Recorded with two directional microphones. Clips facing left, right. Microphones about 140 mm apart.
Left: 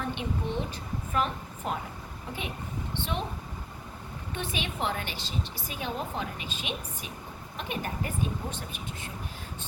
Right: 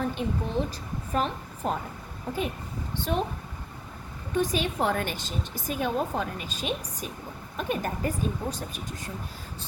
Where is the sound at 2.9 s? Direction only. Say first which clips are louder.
Right 5 dB; 40° right (ahead or behind).